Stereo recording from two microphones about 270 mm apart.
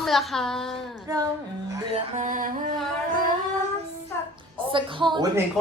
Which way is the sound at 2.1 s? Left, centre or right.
Right.